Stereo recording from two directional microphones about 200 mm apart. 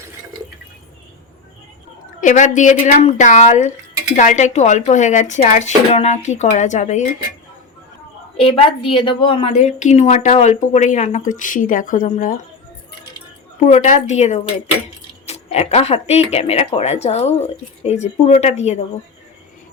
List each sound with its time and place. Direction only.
2.2 s a woman's voice: 40° left (ahead or behind)
8.4 s a woman's voice: 30° left (ahead or behind)
13.7 s a woman's voice: 35° left (ahead or behind)